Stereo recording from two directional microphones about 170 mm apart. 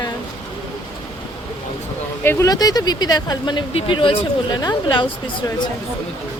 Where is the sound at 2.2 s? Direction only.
15° left (ahead or behind).